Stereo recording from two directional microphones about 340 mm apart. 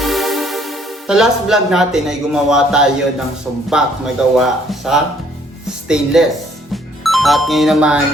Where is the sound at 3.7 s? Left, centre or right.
Centre.